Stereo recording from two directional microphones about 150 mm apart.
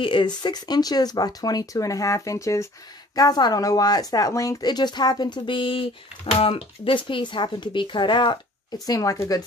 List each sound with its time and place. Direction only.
0.0 s speech: 30° left (ahead or behind)